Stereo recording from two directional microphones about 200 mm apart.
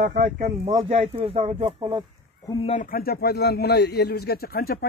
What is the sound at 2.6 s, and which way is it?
A man's voice, 40° left (ahead or behind).